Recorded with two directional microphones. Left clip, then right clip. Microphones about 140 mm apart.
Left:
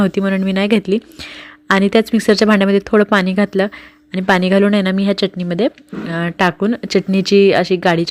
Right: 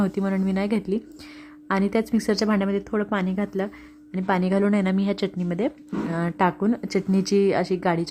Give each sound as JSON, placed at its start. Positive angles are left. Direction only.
{"t": 0.0, "sound": "speech", "side_deg": 20}